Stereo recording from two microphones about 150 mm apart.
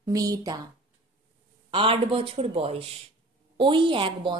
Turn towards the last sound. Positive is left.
turn(degrees=-35)  # may be behind; listen again after turning